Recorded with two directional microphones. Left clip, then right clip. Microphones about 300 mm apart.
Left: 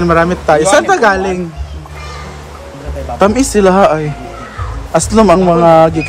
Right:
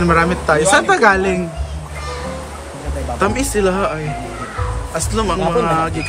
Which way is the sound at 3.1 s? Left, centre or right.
Centre.